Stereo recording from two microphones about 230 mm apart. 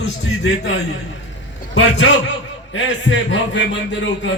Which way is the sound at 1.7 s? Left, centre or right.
Left.